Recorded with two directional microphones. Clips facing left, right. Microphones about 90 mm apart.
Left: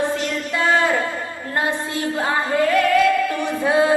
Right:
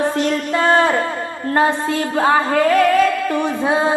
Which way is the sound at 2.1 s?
35° right (ahead or behind).